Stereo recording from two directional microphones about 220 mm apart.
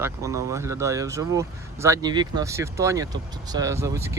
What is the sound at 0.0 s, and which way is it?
Speech, 15° right (ahead or behind).